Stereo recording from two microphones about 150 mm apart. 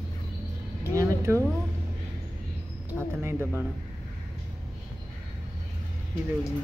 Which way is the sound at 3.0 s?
15° right (ahead or behind).